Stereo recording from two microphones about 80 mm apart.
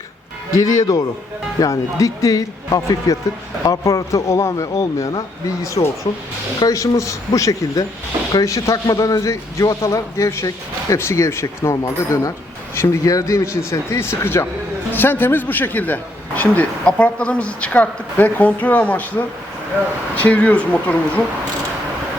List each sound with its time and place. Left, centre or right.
0.5 s a man's voice: left; by 19.2 s centre
20.2 s speech: centre